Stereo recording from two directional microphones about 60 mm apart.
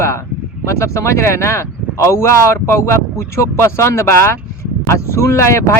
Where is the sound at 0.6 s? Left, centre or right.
Left.